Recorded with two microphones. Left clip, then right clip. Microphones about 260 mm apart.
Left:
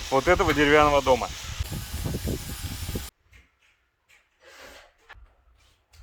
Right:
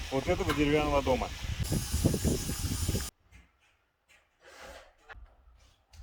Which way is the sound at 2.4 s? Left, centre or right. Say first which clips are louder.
Even; centre.